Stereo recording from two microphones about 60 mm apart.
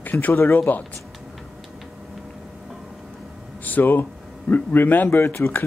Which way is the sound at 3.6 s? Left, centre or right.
Left.